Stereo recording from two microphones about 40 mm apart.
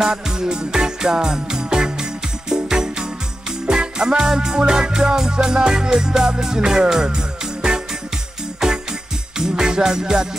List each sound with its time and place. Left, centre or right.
0.0 s music: centre
8.6 s music: centre